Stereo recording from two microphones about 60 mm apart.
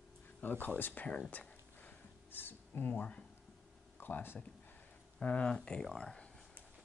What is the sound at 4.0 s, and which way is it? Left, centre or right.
Speech, left.